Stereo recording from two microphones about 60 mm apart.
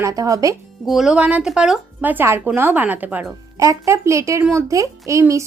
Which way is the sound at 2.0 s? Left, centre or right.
Right.